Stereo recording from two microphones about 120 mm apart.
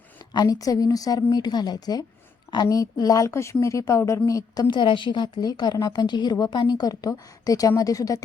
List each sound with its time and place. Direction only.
0.3 s a woman's voice: 30° left (ahead or behind)
4.7 s a woman's voice: 40° left (ahead or behind)